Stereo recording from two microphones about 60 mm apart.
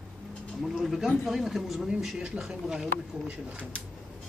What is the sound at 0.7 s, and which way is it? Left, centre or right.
Speech, centre.